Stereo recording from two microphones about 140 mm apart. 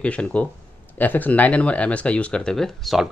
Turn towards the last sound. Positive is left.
turn(degrees=0)  # may be behind; listen again after turning